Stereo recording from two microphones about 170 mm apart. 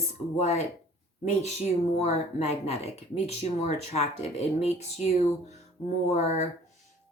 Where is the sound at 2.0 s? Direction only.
40° left (ahead or behind).